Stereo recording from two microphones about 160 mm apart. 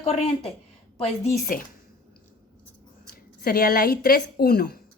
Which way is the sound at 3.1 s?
75° left (ahead or behind).